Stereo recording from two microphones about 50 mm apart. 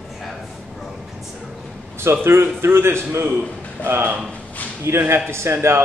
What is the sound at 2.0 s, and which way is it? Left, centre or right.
A man's voice, right.